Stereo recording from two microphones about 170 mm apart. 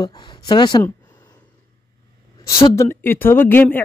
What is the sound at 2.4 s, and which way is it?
Speech, 20° left (ahead or behind).